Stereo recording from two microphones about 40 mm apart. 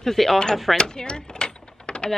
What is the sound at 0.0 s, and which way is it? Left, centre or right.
Speech, centre.